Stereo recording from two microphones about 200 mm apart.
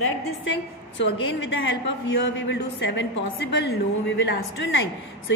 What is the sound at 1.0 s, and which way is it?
A man's voice, 60° left (ahead or behind).